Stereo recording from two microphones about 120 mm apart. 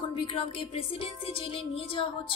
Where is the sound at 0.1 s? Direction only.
50° left (ahead or behind).